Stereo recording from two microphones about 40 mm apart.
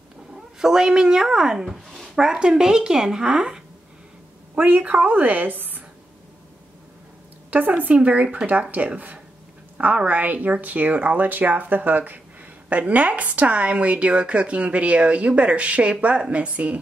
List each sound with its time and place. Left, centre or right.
0.6 s a woman's voice: centre
1.7 s speech: centre
2.3 s a woman's voice: centre
3.3 s speech: right
4.6 s speech: right
7.5 s speech: right
7.9 s a woman's voice: right
12.6 s a woman's voice: right